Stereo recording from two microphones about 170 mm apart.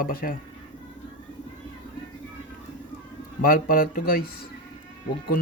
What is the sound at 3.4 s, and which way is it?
Speech, 55° left (ahead or behind).